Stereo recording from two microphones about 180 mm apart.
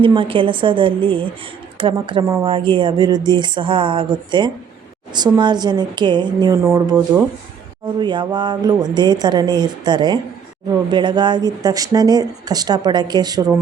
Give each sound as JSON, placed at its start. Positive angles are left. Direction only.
{"t": 0.0, "sound": "speech", "side_deg": -30}
{"t": 6.6, "sound": "speech", "side_deg": -15}